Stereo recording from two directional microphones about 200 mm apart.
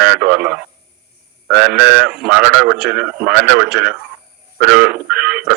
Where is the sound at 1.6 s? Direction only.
50° right (ahead or behind).